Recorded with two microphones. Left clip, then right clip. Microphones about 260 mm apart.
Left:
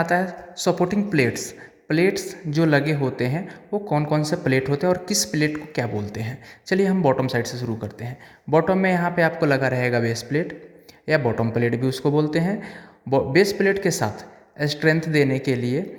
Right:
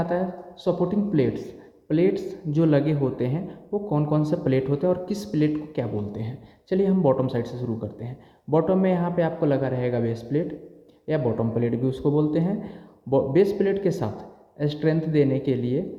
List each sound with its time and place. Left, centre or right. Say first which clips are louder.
0.0 s a man's voice: left 4 dB; left